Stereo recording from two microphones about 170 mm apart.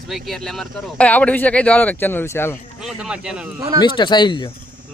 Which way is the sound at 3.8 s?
25° left (ahead or behind).